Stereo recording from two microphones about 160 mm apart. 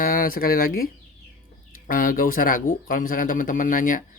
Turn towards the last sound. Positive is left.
turn(degrees=55)  # may be behind; listen again after turning